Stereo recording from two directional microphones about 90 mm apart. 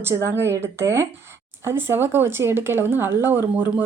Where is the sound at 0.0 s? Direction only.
30° right (ahead or behind).